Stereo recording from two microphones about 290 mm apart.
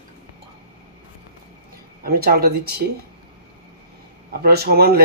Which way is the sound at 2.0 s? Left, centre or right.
Right.